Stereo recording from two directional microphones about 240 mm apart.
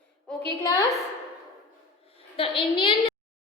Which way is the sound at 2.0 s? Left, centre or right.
Left.